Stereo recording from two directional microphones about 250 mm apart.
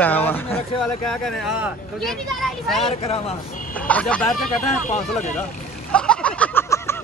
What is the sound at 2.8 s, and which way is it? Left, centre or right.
Speech, left.